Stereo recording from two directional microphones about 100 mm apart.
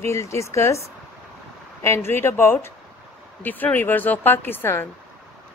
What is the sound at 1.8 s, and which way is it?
A woman's voice, 25° left (ahead or behind).